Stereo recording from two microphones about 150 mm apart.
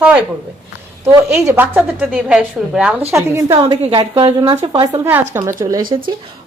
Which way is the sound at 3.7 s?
30° right (ahead or behind).